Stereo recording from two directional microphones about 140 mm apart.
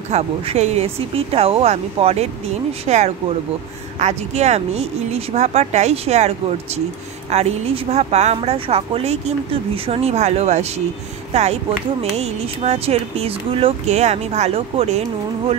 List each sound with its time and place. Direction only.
0.1 s speech: 50° right (ahead or behind)
12.0 s speech: 45° right (ahead or behind)